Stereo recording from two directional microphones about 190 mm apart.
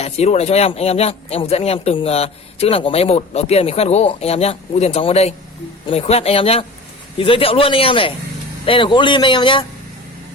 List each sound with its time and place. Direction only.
0.0 s a man's voice: 35° left (ahead or behind)